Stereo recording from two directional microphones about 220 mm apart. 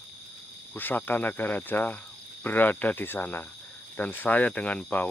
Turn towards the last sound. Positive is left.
turn(degrees=5)  # may be behind; listen again after turning